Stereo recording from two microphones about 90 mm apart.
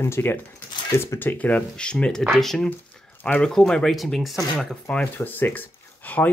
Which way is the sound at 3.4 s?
5° left (ahead or behind).